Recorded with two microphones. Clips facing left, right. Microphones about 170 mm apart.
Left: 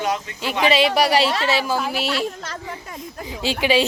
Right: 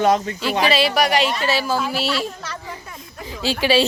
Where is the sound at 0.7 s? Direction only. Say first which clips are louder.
Left 3 dB; 20° left (ahead or behind).